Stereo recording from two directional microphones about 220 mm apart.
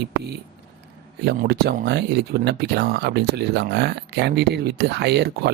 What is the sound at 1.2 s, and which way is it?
Speech, 45° right (ahead or behind).